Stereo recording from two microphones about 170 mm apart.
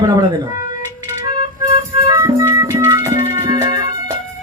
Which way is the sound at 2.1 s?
15° right (ahead or behind).